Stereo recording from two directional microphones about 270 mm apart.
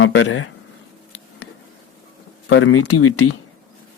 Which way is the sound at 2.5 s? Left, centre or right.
Left.